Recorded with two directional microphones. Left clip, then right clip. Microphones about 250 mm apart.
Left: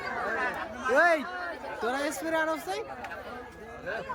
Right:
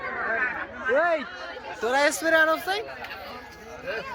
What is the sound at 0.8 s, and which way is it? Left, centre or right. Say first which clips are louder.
Speech: even; centre.